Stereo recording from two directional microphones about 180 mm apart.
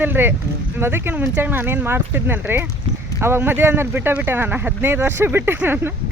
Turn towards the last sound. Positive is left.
turn(degrees=-10)  # may be behind; listen again after turning